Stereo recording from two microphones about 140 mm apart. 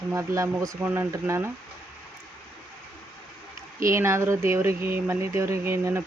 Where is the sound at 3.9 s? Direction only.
20° right (ahead or behind).